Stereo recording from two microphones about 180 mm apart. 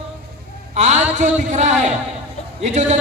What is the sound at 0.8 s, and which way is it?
A man's voice, 40° right (ahead or behind).